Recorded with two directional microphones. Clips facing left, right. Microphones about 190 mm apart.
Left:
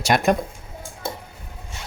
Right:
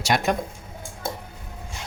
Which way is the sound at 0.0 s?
50° left (ahead or behind).